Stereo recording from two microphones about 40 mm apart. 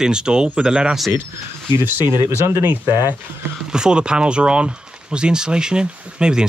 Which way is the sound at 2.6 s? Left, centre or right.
Right.